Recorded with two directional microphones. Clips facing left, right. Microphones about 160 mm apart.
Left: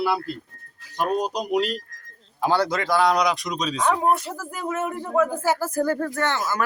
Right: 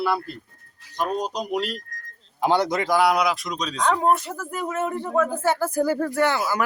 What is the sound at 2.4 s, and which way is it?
Speech, 20° right (ahead or behind).